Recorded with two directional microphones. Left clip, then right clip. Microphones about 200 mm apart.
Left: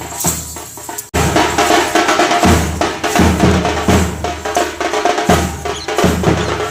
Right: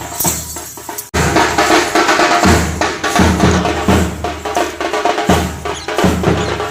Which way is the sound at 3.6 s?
Centre (ahead or behind).